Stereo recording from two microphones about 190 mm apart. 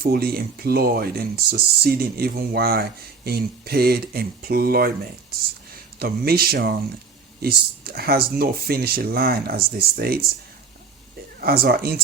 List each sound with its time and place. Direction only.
0.0 s speech: 55° right (ahead or behind)
6.0 s speech: 55° right (ahead or behind)
11.3 s speech: 50° right (ahead or behind)